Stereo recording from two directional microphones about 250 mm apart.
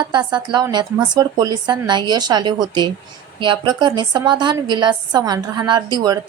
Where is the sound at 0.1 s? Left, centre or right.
Centre.